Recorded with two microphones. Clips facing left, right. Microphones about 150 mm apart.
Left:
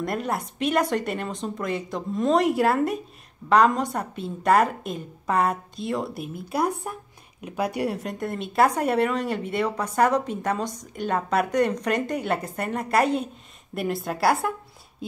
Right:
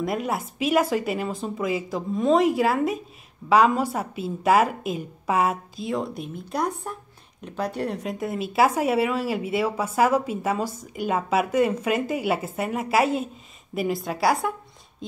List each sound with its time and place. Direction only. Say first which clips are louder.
0.0 s speech: right 1 dB; centre (ahead or behind)
8.0 s speech: right 2 dB; centre (ahead or behind)